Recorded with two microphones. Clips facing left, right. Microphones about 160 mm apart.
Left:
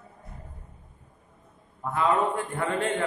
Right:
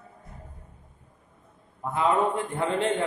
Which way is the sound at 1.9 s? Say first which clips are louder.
Right 1 dB; 20° right (ahead or behind).